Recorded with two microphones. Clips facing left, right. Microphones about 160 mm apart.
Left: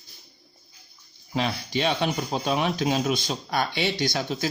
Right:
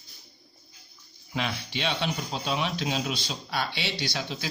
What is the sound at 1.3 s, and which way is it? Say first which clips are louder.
Speech: left 5 dB; 40° left (ahead or behind).